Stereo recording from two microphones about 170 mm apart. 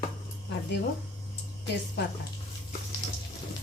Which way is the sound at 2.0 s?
80° left.